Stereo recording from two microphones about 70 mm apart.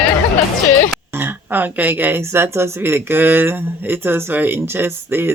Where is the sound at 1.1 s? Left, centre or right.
Right.